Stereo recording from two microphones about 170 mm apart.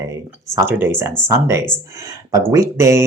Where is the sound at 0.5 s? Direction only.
15° right (ahead or behind).